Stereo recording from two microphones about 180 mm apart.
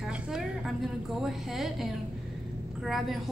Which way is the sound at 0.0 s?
5° right (ahead or behind).